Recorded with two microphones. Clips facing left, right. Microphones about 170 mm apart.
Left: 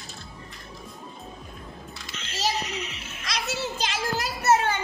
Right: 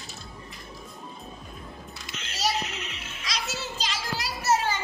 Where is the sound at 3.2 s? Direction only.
55° left (ahead or behind).